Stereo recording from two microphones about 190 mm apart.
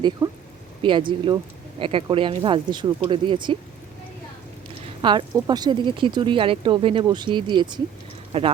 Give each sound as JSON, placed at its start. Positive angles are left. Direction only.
{"t": 0.2, "sound": "speech", "side_deg": -15}
{"t": 0.8, "sound": "speech", "side_deg": -25}
{"t": 5.0, "sound": "speech", "side_deg": -25}